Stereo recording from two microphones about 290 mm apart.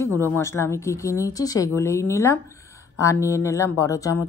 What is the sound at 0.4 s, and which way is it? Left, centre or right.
Speech, centre.